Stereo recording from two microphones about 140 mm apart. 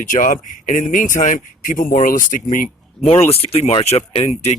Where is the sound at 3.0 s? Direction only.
45° left (ahead or behind).